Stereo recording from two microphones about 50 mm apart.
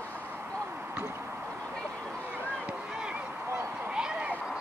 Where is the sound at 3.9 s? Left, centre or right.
Centre.